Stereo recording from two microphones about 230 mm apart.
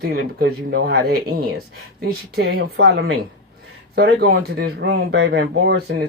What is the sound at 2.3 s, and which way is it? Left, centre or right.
Speech, right.